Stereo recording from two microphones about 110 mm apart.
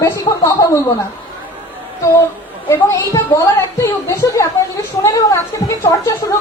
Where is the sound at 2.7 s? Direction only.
25° left (ahead or behind).